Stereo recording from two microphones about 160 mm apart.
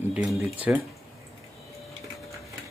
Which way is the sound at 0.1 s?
5° right (ahead or behind).